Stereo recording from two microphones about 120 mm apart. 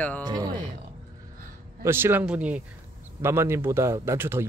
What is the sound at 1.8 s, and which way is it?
Speech, 20° right (ahead or behind).